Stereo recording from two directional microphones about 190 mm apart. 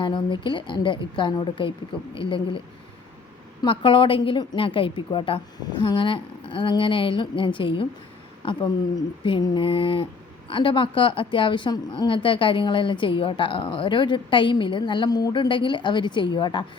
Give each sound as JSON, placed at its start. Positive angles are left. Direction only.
{"t": 0.0, "sound": "a woman's voice", "side_deg": 25}
{"t": 3.6, "sound": "a woman's voice", "side_deg": 25}
{"t": 9.2, "sound": "a woman's voice", "side_deg": 25}